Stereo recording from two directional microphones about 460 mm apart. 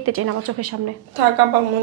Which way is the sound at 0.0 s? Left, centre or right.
Right.